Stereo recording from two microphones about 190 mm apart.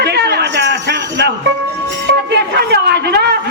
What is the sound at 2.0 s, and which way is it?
Music, 60° right (ahead or behind).